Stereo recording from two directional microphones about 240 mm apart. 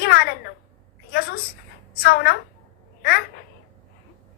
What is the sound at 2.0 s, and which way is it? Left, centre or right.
A woman's voice, left.